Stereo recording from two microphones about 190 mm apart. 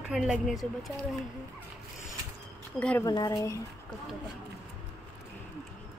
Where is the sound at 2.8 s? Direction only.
5° left (ahead or behind).